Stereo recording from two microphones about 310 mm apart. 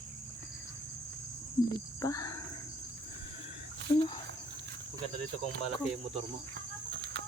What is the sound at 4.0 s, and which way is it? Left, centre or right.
Speech, centre.